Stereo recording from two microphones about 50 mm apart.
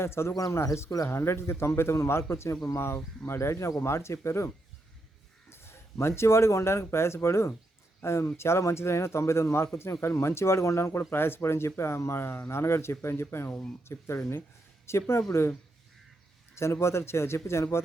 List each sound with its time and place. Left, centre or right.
0.0 s speech: left
5.5 s speech: left
16.6 s speech: left